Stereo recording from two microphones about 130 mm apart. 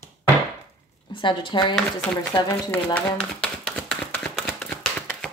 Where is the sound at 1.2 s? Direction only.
40° left (ahead or behind).